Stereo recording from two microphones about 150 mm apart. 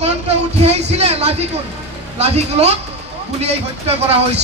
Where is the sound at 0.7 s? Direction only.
45° right (ahead or behind).